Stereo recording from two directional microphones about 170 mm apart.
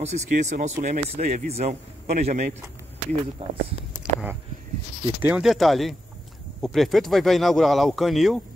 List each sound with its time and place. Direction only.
0.0 s speech: 40° right (ahead or behind)
3.4 s speech: 30° right (ahead or behind)
4.0 s a sound: 5° right (ahead or behind)
5.2 s speech: 5° right (ahead or behind)